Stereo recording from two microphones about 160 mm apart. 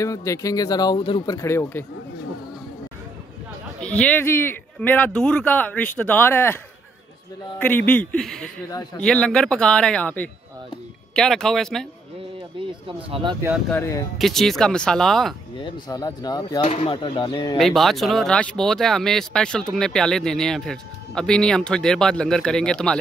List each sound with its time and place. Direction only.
0.0 s speech: 20° left (ahead or behind)
3.8 s speech: 5° left (ahead or behind)
12.5 s speech: 35° right (ahead or behind)
13.7 s speech: 20° left (ahead or behind)
14.1 s speech: centre (ahead or behind)
15.5 s speech: 25° left (ahead or behind)
16.6 s speech: 45° left (ahead or behind)
16.9 s speech: 30° left (ahead or behind)
17.6 s speech: centre (ahead or behind)